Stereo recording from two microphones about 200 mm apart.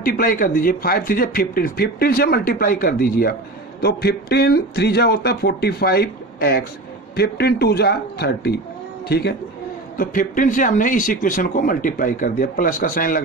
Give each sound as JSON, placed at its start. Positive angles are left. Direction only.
{"t": 0.0, "sound": "speech", "side_deg": 45}
{"t": 9.9, "sound": "speech", "side_deg": 40}